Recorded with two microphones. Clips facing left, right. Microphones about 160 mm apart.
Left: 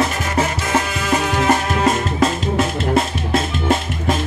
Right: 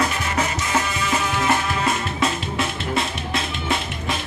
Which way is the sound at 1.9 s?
45° left (ahead or behind).